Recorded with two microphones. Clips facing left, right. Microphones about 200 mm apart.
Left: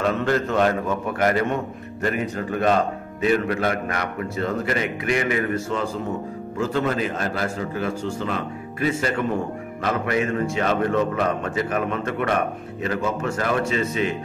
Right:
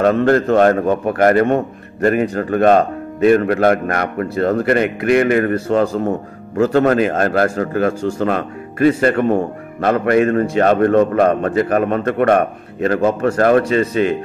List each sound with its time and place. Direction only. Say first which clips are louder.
0.0 s a man's voice: right 8 dB; 55° right (ahead or behind)